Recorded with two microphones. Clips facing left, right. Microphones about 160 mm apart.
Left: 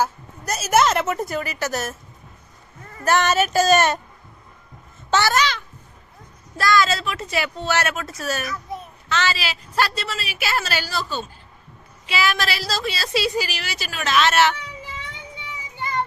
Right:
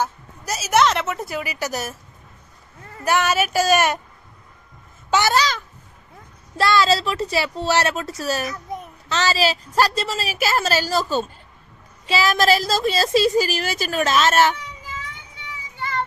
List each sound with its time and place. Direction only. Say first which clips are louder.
0.0 s a woman's voice: left 2 dB; centre (ahead or behind)
3.0 s speech: left 1 dB; 10° right (ahead or behind)
5.3 s a woman's voice: right 1 dB; 35° right (ahead or behind)